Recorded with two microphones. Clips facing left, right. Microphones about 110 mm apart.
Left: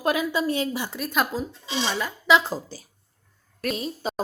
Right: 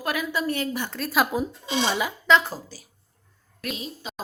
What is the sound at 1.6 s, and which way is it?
Speech, 50° right (ahead or behind).